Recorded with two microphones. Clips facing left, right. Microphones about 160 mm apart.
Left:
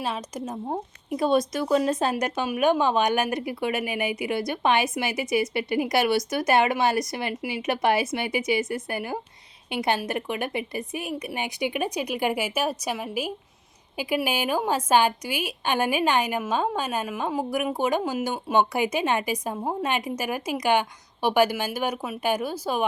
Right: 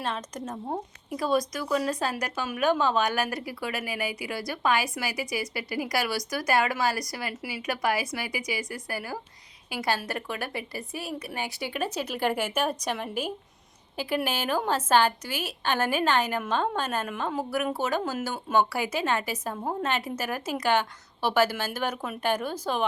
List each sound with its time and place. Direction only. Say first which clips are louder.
0.0 s a woman's voice: left 2 dB; 10° left (ahead or behind)
1.1 s a woman's voice: left 4 dB; 25° left (ahead or behind)